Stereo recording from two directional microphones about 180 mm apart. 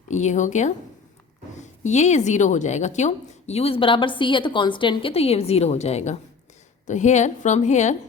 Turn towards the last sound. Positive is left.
turn(degrees=40)  # may be behind; listen again after turning